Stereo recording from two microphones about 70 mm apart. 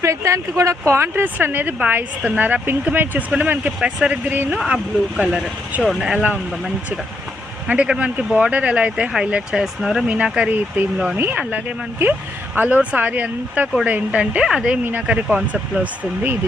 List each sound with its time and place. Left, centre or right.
0.0 s speech: right; by 6.2 s centre
7.7 s speech: centre
10.2 s speech: centre
11.2 s speech: right
14.4 s speech: centre